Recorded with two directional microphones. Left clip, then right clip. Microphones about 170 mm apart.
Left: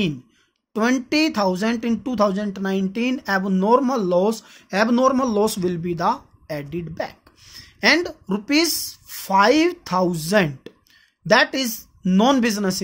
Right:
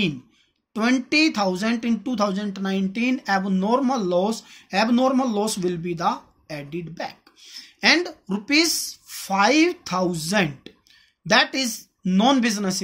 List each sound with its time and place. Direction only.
0.7 s speech: 55° left (ahead or behind)